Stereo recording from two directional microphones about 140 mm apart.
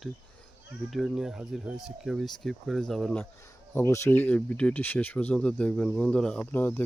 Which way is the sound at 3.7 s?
20° left (ahead or behind).